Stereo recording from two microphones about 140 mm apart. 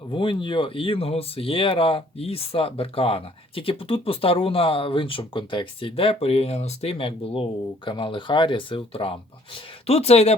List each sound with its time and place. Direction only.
0.1 s speech: 35° left (ahead or behind)